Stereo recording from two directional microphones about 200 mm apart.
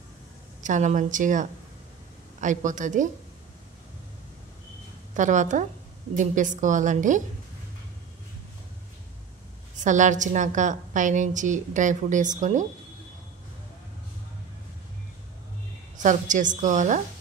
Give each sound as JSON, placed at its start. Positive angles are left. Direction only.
{"t": 0.6, "sound": "a woman's voice", "side_deg": -40}
{"t": 5.1, "sound": "a woman's voice", "side_deg": -40}
{"t": 9.8, "sound": "a woman's voice", "side_deg": -40}
{"t": 16.0, "sound": "a woman's voice", "side_deg": -40}